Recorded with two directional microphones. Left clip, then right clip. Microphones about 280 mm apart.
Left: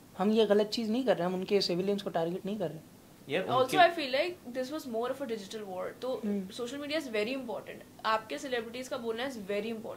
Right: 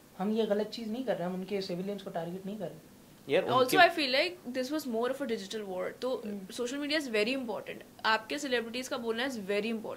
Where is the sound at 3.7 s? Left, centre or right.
Right.